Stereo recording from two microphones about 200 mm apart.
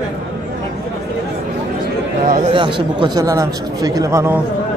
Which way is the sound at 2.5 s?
25° right (ahead or behind).